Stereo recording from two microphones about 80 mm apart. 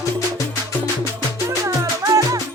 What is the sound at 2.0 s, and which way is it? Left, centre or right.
Music, right.